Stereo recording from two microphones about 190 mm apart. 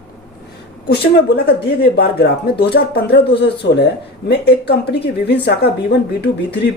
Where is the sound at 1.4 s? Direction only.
55° left (ahead or behind).